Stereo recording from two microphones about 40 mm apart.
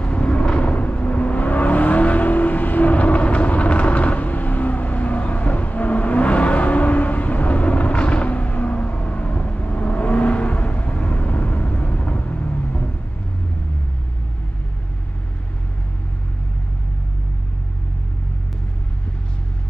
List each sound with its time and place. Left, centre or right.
0.0 s vehicle: left